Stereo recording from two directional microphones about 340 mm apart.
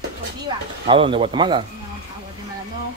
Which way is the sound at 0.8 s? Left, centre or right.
Centre.